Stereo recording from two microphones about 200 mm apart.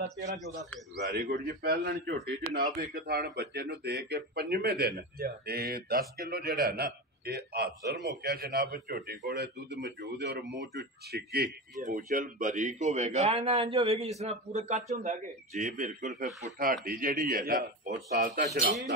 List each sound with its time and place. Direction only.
1.1 s speech: 45° right (ahead or behind)